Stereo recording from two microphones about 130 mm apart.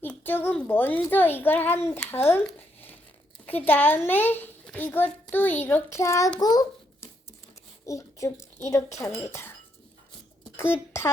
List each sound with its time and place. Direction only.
0.0 s a woman's voice: 15° left (ahead or behind)
2.6 s a sound: 15° left (ahead or behind)
3.4 s a woman's voice: 15° left (ahead or behind)
10.6 s speech: 20° left (ahead or behind)